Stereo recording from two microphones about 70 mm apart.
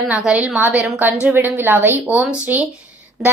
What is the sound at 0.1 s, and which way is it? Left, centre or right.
Speech, centre.